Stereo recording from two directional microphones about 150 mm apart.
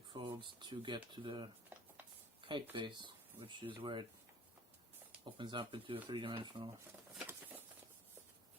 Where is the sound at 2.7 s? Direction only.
30° right (ahead or behind).